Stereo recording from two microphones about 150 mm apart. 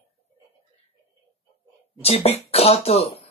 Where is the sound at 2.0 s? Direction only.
45° left (ahead or behind).